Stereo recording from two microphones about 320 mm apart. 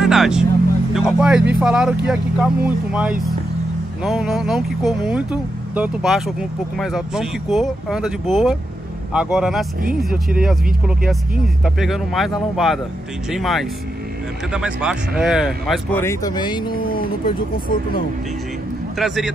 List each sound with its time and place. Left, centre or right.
0.0 s vehicle: centre
0.9 s speech: centre
11.6 s speech: centre
16.6 s speech: left
18.9 s speech: centre